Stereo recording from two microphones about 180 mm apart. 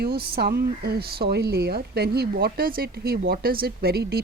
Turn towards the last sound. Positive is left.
turn(degrees=-60)  # may be behind; listen again after turning